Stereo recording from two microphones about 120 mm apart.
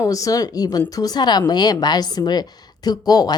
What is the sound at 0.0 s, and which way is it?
A woman's voice, 30° left (ahead or behind).